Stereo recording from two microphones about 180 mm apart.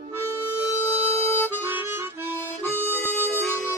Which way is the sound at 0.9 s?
35° right (ahead or behind).